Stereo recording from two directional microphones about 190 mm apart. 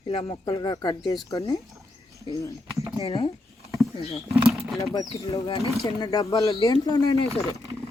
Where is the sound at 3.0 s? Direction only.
30° left (ahead or behind).